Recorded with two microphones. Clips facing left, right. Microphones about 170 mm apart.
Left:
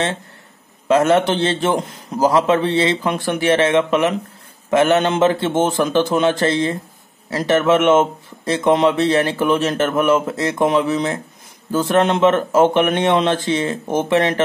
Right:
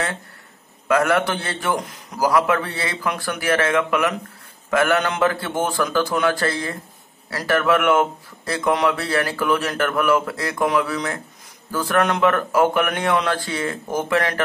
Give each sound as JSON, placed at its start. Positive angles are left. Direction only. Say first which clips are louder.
{"t": 0.8, "sound": "speech", "louder": "left 4 dB", "side_deg": 25}